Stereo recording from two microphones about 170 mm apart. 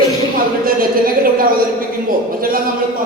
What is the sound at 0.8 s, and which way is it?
Speech, 60° right (ahead or behind).